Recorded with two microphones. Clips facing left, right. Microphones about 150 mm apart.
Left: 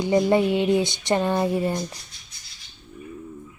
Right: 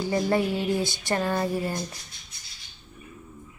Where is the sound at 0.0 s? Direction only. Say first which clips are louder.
Left 5 dB; 20° left (ahead or behind).